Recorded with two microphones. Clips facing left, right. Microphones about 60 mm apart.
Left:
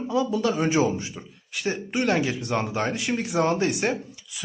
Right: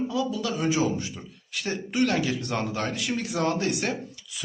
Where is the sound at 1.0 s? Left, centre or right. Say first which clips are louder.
Even; centre.